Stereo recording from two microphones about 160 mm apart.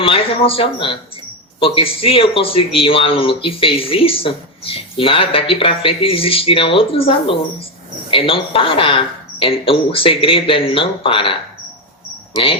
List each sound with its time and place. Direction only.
0.0 s speech: 35° left (ahead or behind)